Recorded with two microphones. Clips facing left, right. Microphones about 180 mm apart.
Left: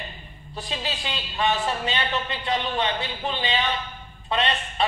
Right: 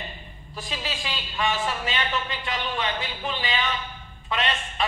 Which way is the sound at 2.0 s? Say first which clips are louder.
Left 1 dB; 30° left (ahead or behind).